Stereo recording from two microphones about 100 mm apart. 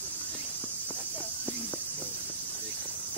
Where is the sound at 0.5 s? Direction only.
20° left (ahead or behind).